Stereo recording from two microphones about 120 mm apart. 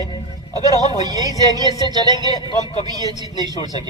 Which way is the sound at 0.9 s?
35° right (ahead or behind).